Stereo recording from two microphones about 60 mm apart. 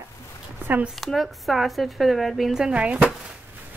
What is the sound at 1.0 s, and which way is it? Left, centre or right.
Speech, centre.